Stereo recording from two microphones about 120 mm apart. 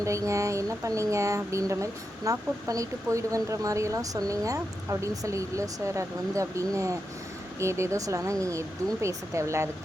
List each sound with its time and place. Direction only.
0.0 s speech: 25° right (ahead or behind)